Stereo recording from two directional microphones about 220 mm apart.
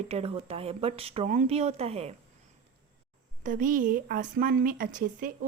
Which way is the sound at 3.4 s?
35° right (ahead or behind).